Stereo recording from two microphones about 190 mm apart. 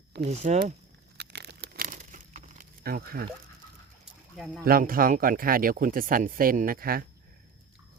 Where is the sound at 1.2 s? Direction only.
60° right (ahead or behind).